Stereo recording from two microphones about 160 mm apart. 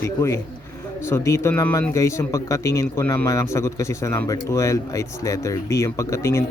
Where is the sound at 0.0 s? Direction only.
15° left (ahead or behind).